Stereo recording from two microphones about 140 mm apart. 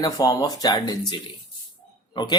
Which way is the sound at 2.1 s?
30° left (ahead or behind).